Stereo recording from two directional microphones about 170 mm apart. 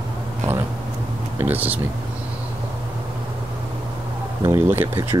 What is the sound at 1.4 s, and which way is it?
Speech, 10° right (ahead or behind).